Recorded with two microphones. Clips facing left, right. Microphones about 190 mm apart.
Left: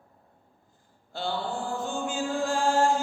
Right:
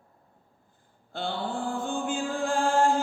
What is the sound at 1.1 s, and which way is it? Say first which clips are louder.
Chant: even; 55° right (ahead or behind).